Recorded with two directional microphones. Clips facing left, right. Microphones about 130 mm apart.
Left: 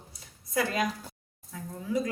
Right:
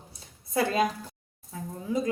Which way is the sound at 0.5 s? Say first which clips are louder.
Right 3 dB; 30° right (ahead or behind).